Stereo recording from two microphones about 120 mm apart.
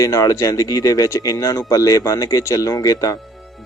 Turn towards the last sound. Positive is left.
turn(degrees=30)  # may be behind; listen again after turning